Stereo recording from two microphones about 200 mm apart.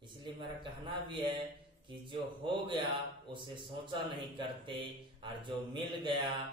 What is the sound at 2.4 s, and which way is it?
Speech, 25° right (ahead or behind).